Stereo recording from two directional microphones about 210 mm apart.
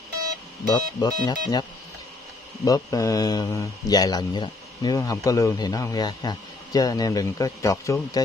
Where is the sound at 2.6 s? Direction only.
15° left (ahead or behind).